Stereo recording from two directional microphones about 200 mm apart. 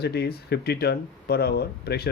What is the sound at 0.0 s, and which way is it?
Speech, 55° left (ahead or behind).